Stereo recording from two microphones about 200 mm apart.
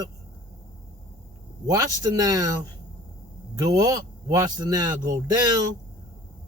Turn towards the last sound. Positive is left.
turn(degrees=-20)  # may be behind; listen again after turning